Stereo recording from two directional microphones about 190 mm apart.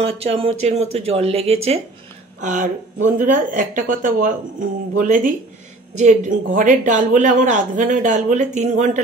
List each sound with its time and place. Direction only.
0.0 s a woman's voice: 30° right (ahead or behind)